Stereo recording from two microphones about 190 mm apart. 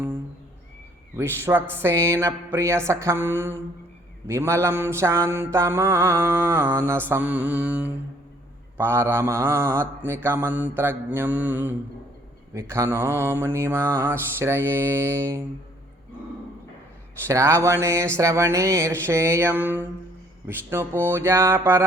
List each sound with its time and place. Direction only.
1.1 s mantra: 10° right (ahead or behind)
17.2 s mantra: 15° right (ahead or behind)